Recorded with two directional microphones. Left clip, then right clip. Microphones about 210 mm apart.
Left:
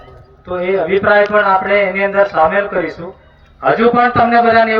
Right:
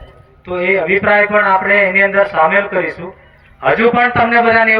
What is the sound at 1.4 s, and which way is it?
Speech, 30° right (ahead or behind).